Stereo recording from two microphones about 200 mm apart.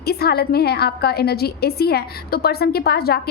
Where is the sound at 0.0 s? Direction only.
50° left (ahead or behind).